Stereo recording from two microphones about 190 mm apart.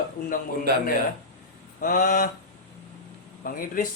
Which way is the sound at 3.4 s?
50° left (ahead or behind).